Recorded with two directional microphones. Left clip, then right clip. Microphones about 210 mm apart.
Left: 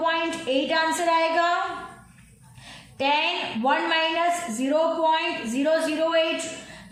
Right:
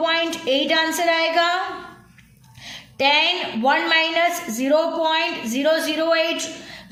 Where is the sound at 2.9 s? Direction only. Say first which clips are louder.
Right 5 dB; 30° right (ahead or behind).